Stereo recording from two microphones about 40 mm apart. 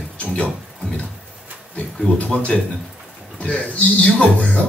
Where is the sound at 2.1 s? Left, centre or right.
Left.